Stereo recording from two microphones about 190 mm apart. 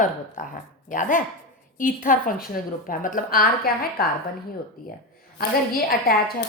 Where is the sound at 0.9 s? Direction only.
45° left (ahead or behind).